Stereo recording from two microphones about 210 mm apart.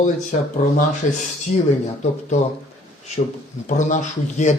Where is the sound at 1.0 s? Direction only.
35° left (ahead or behind).